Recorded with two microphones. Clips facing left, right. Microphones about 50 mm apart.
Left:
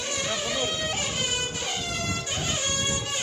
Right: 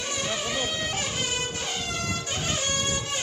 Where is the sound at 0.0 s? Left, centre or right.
Centre.